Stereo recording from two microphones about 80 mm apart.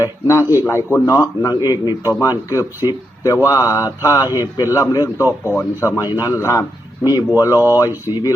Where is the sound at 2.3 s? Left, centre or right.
Left.